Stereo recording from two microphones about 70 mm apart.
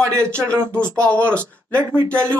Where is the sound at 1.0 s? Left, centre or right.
Centre.